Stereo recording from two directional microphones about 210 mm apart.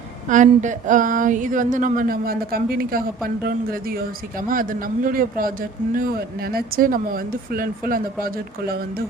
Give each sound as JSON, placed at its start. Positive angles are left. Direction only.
{"t": 0.3, "sound": "a man's voice", "side_deg": -35}